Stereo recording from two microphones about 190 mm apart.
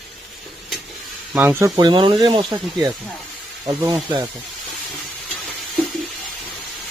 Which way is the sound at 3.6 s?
20° right (ahead or behind).